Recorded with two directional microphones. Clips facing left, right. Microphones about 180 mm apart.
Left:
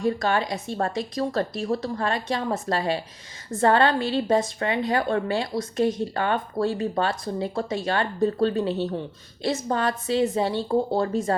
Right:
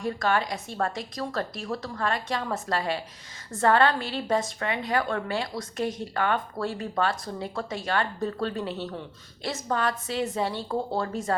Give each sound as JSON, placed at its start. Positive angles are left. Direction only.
{"t": 0.0, "sound": "a woman's voice", "side_deg": 25}